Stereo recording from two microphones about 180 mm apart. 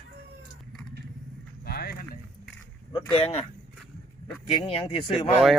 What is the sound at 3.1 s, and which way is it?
Speech, 35° left (ahead or behind).